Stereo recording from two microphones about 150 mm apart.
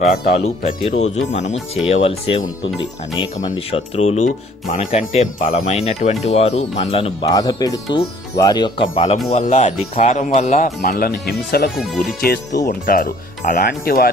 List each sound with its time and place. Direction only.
0.3 s speech: 45° left (ahead or behind)
3.4 s speech: 40° left (ahead or behind)
7.3 s speech: 25° left (ahead or behind)
9.3 s speech: 45° left (ahead or behind)
10.8 s speech: 90° left
12.6 s speech: 70° left (ahead or behind)